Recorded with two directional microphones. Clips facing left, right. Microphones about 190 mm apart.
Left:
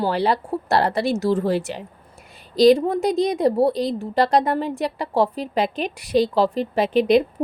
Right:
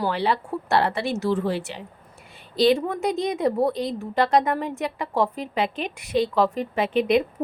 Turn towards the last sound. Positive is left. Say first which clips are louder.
# left 4 dB
turn(degrees=35)  # may be behind; listen again after turning